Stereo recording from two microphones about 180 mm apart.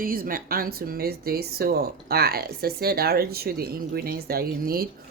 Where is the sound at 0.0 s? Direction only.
50° right (ahead or behind).